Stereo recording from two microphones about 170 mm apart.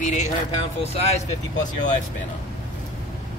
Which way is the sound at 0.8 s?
40° left (ahead or behind).